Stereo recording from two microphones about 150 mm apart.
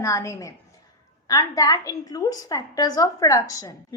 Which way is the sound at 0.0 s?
20° left (ahead or behind).